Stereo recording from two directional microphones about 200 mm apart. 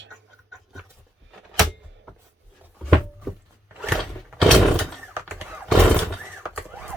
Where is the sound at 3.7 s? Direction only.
5° right (ahead or behind).